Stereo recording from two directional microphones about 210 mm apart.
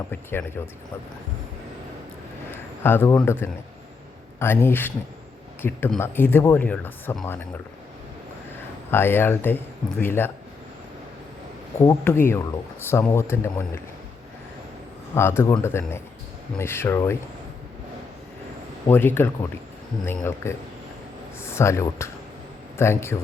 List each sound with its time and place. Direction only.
0.1 s speech: 10° left (ahead or behind)
2.5 s a sound: 10° left (ahead or behind)
4.4 s speech: 10° left (ahead or behind)
8.9 s speech: 10° left (ahead or behind)
11.8 s speech: 10° left (ahead or behind)
15.1 s speech: 10° left (ahead or behind)
18.9 s speech: 10° left (ahead or behind)